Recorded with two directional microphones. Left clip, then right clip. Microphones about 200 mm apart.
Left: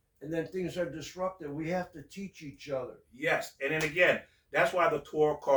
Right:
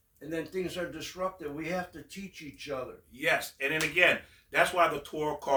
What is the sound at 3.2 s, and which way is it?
Speech, 15° right (ahead or behind).